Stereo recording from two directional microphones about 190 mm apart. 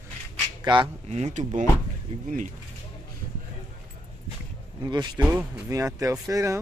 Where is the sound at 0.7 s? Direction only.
25° right (ahead or behind).